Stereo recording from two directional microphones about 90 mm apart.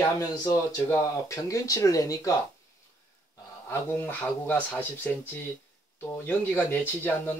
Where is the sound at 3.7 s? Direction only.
20° left (ahead or behind).